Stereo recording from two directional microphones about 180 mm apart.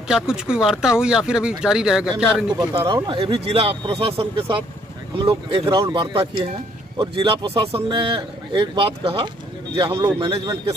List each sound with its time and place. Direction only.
0.1 s speech: 5° right (ahead or behind)
2.6 s speech: 25° right (ahead or behind)
9.9 s a man's voice: 15° right (ahead or behind)
10.2 s speech: 25° right (ahead or behind)